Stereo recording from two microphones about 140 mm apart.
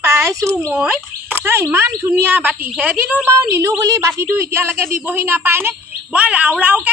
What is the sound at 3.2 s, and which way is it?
A woman's voice, 20° right (ahead or behind).